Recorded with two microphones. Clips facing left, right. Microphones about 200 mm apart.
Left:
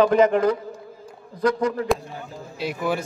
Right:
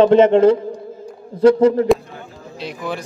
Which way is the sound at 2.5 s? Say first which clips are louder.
Left 2 dB; 5° left (ahead or behind).